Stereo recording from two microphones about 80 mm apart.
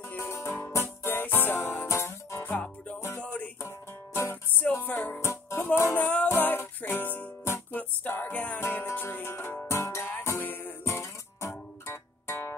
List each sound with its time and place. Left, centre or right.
0.1 s music: left
1.9 s music: left; by 3.4 s centre
3.6 s music: left
5.2 s music: left
5.9 s music: left